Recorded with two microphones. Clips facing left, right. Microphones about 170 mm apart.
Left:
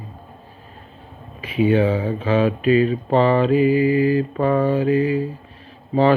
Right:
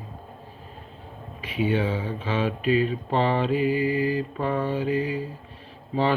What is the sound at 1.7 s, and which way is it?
Mantra, 90° left.